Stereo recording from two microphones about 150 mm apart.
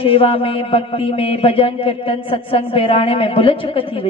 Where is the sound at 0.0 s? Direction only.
40° left (ahead or behind).